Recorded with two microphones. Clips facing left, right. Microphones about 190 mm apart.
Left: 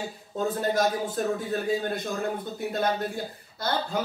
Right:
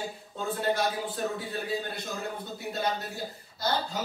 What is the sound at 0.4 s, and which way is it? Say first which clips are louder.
A man's voice: left 4 dB; 40° left (ahead or behind).